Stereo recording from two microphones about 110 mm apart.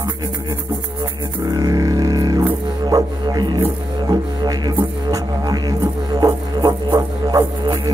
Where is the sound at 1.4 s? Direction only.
35° right (ahead or behind).